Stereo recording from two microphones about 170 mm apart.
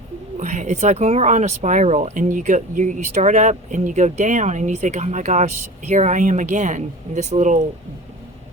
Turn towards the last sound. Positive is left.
turn(degrees=-45)  # may be behind; listen again after turning